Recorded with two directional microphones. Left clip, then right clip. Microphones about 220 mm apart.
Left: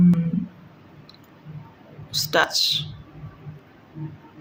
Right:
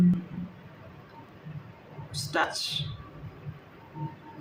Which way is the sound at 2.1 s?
50° left (ahead or behind).